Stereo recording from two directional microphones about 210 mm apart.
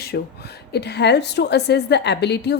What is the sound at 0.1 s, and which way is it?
A woman's voice, 50° left (ahead or behind).